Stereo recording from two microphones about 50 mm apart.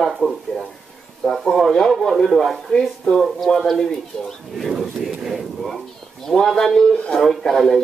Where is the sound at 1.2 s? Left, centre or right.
Centre.